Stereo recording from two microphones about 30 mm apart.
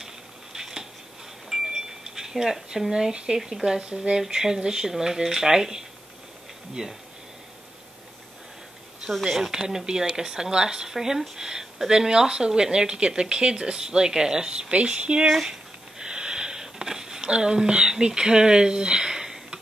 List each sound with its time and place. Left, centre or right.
0.0 s a sound: centre
2.9 s speech: centre
3.8 s speech: right
4.3 s speech: centre
9.4 s speech: centre
14.7 s speech: right
16.0 s wheeze: right
17.4 s speech: centre
17.6 s speech: right